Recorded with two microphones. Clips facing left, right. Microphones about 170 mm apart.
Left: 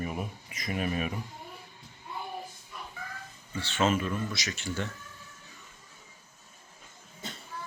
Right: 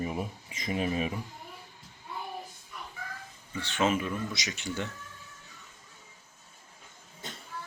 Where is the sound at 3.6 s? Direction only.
15° right (ahead or behind).